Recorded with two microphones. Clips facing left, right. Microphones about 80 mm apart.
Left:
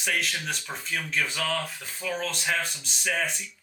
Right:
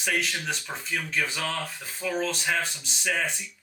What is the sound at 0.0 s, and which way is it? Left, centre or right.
Speech, centre.